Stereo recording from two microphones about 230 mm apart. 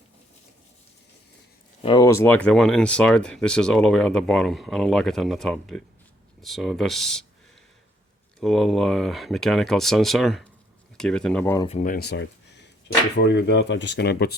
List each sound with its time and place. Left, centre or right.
1.8 s speech: centre
8.4 s speech: centre
11.7 s speech: left